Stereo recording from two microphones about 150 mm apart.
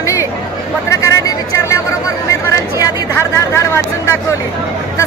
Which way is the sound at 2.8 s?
15° left (ahead or behind).